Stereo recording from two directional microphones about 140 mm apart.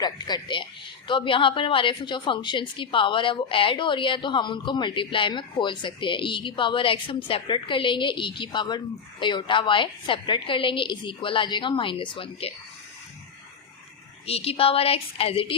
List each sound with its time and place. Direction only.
0.0 s a woman's voice: 30° left (ahead or behind)
14.3 s a woman's voice: 45° left (ahead or behind)